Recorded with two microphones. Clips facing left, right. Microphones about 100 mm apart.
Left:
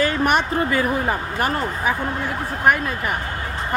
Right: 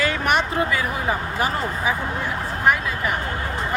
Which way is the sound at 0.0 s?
40° left (ahead or behind).